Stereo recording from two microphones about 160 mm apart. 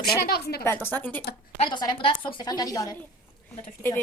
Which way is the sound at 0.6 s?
15° left (ahead or behind).